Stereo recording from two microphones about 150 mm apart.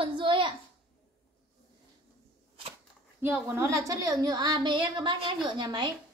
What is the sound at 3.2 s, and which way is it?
A woman's voice, 15° right (ahead or behind).